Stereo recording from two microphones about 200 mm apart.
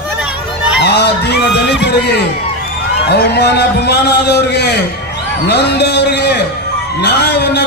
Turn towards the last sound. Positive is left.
turn(degrees=55)  # may be behind; listen again after turning